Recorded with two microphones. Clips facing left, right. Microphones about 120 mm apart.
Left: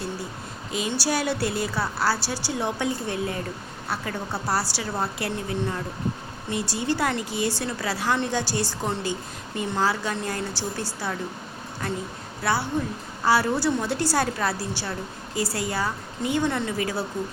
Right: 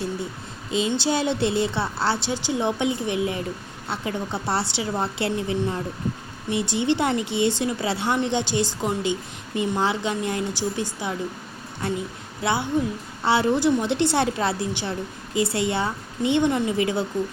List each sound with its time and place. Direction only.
0.7 s a woman's voice: 25° right (ahead or behind)
12.4 s a woman's voice: 20° right (ahead or behind)